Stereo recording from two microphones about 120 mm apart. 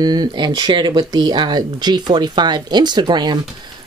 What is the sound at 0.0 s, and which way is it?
A woman's voice, 35° right (ahead or behind).